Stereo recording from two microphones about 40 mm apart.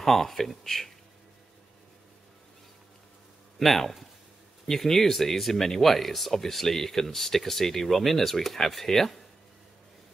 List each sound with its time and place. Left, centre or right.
0.0 s speech: centre
3.5 s speech: centre